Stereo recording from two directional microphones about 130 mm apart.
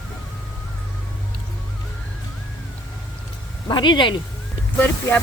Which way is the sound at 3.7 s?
35° left (ahead or behind).